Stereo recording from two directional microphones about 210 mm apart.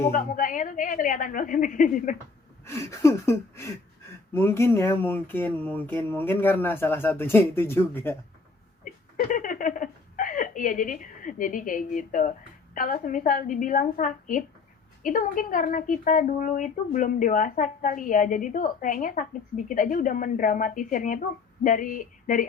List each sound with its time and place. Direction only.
0.1 s a woman's voice: 40° left (ahead or behind)
2.6 s speech: 15° left (ahead or behind)
8.8 s a sound: 40° left (ahead or behind)
12.7 s a woman's voice: 40° left (ahead or behind)